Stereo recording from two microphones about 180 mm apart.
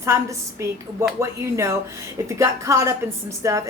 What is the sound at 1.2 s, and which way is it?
A woman's voice, 15° right (ahead or behind).